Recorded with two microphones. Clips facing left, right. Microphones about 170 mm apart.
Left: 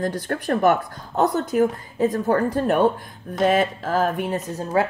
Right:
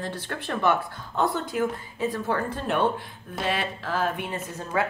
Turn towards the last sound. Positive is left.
turn(degrees=35)  # may be behind; listen again after turning